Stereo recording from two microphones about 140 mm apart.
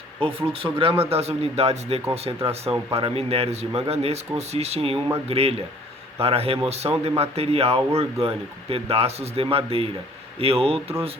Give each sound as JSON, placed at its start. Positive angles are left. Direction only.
{"t": 0.2, "sound": "speech", "side_deg": -40}